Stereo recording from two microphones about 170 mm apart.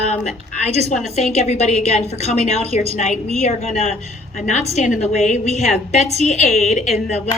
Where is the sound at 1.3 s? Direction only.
40° left (ahead or behind).